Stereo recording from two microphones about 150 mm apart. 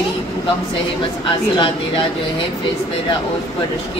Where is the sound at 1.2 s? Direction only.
35° left (ahead or behind).